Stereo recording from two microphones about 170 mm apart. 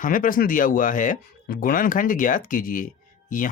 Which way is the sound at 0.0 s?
55° left (ahead or behind).